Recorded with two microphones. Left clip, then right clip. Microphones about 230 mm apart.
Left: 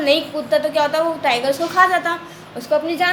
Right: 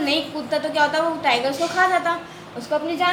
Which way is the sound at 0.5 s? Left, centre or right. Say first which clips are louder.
Left 3 dB; left.